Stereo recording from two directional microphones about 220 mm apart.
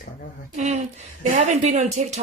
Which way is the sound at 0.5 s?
30° right (ahead or behind).